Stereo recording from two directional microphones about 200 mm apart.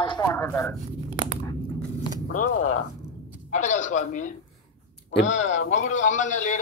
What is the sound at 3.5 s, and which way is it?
A man's voice, 40° left (ahead or behind).